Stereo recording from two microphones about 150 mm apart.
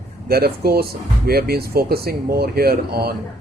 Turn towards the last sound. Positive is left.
turn(degrees=-90)